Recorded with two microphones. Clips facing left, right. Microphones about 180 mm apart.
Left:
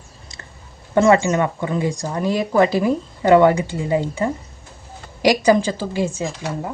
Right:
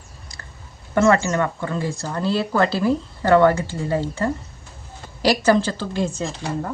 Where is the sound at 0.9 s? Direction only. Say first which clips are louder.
Left 3 dB; 15° left (ahead or behind).